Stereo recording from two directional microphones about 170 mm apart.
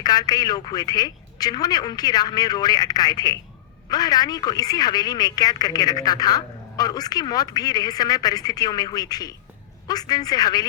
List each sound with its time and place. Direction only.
0.0 s speech: 25° left (ahead or behind)